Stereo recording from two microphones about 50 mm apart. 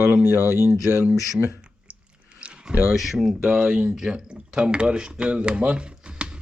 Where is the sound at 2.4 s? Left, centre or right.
Right.